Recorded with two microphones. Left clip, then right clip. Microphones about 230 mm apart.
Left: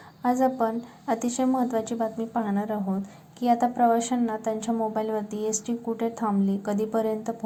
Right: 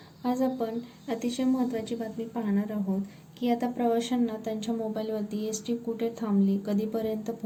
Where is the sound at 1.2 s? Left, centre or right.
Centre.